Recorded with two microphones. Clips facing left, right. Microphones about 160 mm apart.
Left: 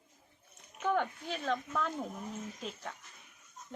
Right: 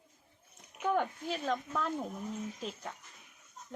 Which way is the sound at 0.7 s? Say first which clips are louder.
Even; 10° right (ahead or behind).